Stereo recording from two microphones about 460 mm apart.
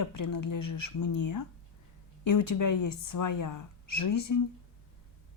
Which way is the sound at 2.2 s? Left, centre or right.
Left.